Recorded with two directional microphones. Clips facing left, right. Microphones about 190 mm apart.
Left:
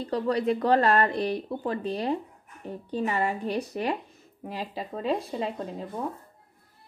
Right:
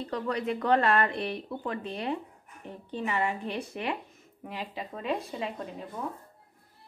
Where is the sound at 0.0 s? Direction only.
35° left (ahead or behind).